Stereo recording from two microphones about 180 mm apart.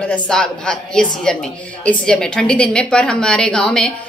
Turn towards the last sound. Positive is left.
turn(degrees=5)  # may be behind; listen again after turning